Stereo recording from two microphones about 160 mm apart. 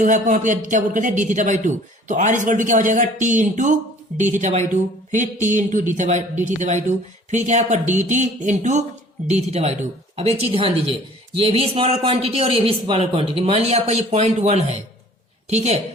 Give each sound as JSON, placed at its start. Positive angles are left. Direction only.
{"t": 0.0, "sound": "a man's voice", "side_deg": -50}